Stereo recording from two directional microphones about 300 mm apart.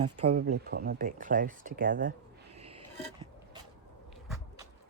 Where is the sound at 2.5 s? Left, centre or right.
Centre.